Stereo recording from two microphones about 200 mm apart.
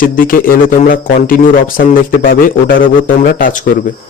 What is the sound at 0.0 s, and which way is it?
Speech, 45° left (ahead or behind).